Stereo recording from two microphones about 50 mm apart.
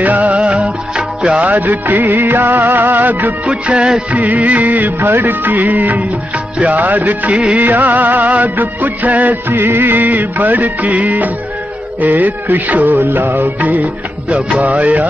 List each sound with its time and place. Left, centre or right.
0.0 s music: right
1.4 s music: right
3.6 s music of bollywood: right
5.2 s music: right